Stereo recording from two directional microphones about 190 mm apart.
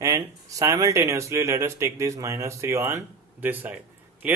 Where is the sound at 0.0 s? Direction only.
15° right (ahead or behind).